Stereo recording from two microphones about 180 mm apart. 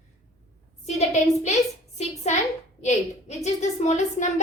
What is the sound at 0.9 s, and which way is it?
Speech, 40° left (ahead or behind).